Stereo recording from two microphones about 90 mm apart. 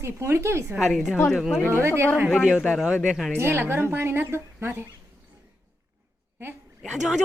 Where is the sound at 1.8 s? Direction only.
30° right (ahead or behind).